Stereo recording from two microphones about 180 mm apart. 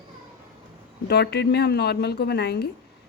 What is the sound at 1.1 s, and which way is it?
A woman's voice, 65° left (ahead or behind).